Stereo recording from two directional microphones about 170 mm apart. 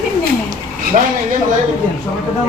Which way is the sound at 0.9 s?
45° right (ahead or behind).